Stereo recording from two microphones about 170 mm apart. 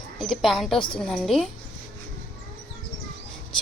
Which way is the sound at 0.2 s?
Centre (ahead or behind).